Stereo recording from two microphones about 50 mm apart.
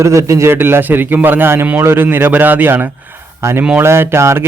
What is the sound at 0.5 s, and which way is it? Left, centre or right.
A man's voice, right.